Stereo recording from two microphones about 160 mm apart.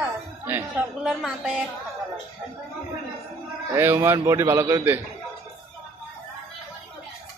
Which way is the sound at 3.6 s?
15° right (ahead or behind).